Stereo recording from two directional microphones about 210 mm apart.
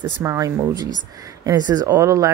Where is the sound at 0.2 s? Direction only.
15° right (ahead or behind).